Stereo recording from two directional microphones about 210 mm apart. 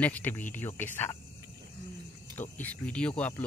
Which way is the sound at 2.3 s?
10° left (ahead or behind).